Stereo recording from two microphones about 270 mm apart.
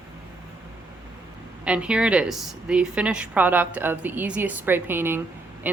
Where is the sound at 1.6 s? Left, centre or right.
Centre.